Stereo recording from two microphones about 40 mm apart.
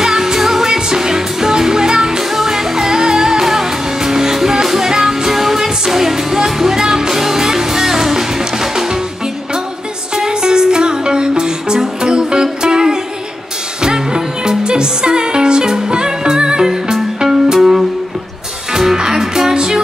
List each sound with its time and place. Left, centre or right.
0.0 s music: centre
10.1 s music: centre
18.7 s music: centre